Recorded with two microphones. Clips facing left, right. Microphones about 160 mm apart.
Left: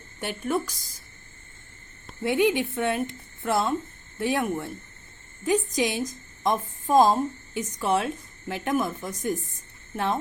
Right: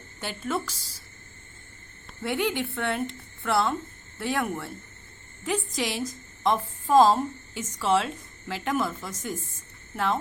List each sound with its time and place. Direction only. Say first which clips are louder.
0.2 s a woman's voice: left 3 dB; 15° left (ahead or behind)
2.2 s a woman's voice: left 5 dB; 20° left (ahead or behind)